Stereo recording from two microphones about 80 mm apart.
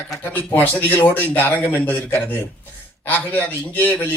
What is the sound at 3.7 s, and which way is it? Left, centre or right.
Speech, left.